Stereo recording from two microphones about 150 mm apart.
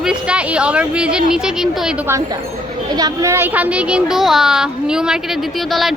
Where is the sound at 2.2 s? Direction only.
25° right (ahead or behind); by 5.9 s centre (ahead or behind).